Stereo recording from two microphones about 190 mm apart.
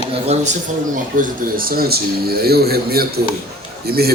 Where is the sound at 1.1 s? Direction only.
45° right (ahead or behind).